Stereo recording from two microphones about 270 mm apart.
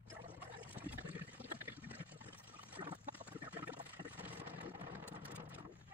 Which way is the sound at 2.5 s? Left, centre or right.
Centre.